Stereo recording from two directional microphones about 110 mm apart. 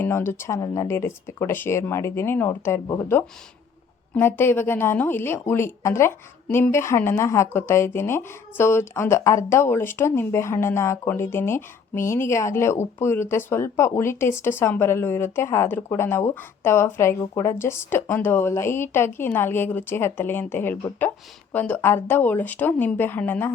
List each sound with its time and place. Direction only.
0.0 s a woman's voice: 20° left (ahead or behind)
4.1 s a woman's voice: 20° left (ahead or behind)